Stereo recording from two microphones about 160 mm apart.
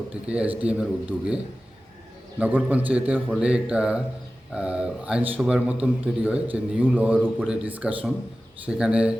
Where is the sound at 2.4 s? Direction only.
10° right (ahead or behind).